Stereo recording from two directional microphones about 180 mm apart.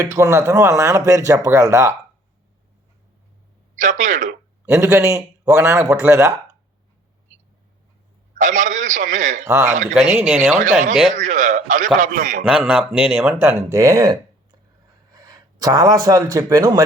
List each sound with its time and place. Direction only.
0.0 s speech: 15° right (ahead or behind)
3.8 s a man's voice: 45° right (ahead or behind)
4.7 s speech: 15° right (ahead or behind)
8.4 s a man's voice: 45° right (ahead or behind)
9.9 s speech: 5° right (ahead or behind)
10.6 s a man's voice: 45° right (ahead or behind)
12.5 s speech: 5° right (ahead or behind)